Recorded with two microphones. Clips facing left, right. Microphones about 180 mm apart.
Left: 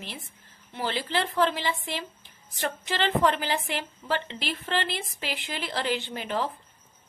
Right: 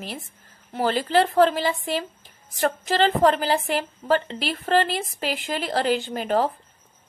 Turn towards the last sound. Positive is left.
turn(degrees=-45)  # may be behind; listen again after turning